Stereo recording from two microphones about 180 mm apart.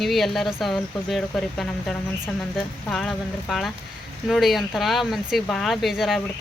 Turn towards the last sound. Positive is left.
turn(degrees=0)  # may be behind; listen again after turning